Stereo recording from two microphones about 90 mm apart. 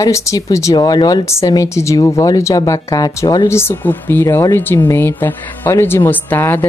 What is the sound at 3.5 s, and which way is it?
Speech, 25° left (ahead or behind).